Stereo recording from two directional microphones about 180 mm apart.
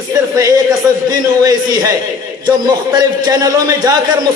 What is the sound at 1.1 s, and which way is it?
A man's voice, 20° right (ahead or behind).